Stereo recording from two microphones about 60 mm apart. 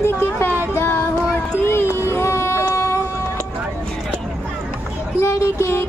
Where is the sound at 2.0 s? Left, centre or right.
Left.